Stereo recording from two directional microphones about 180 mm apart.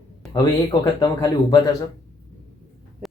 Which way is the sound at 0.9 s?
20° left (ahead or behind).